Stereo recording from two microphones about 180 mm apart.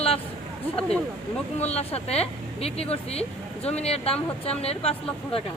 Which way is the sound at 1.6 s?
35° left (ahead or behind).